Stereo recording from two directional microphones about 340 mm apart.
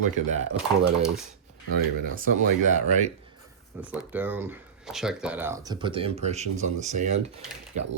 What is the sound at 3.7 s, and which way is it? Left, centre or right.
Speech, centre.